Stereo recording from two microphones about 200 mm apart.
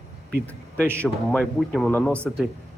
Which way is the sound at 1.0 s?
5° left (ahead or behind).